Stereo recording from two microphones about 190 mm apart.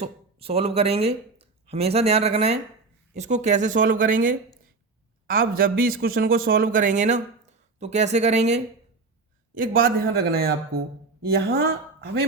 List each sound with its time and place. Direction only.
0.0 s speech: 30° right (ahead or behind)
10.0 s speech: 55° right (ahead or behind)